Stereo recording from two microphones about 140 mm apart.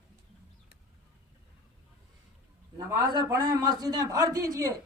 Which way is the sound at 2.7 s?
30° right (ahead or behind).